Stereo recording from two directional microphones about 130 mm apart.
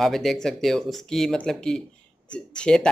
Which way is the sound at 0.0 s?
Centre (ahead or behind).